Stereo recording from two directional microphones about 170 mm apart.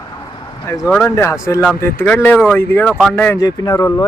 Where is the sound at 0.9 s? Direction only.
5° left (ahead or behind).